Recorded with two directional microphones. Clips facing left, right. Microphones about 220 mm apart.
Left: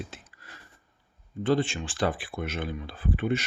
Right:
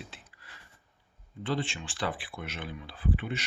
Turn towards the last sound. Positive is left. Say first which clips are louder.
# left 5 dB
turn(degrees=45)  # may be behind; listen again after turning